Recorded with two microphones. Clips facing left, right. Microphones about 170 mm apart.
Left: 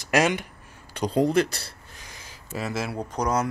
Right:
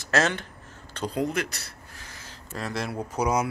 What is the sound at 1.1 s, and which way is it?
Speech, 30° left (ahead or behind).